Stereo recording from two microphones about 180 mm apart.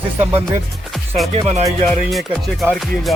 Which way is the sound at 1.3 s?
35° right (ahead or behind).